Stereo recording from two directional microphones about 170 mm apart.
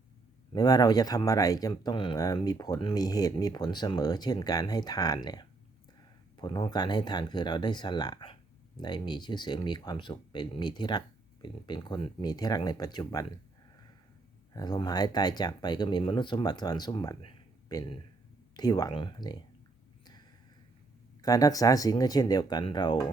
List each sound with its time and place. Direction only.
0.5 s speech: 25° left (ahead or behind)
14.5 s speech: 25° left (ahead or behind)
21.2 s speech: 20° left (ahead or behind)